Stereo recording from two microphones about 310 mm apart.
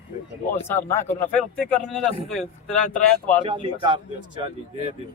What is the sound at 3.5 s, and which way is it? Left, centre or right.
Speech, centre.